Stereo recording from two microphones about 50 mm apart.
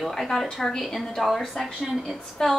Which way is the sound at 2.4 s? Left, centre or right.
Centre.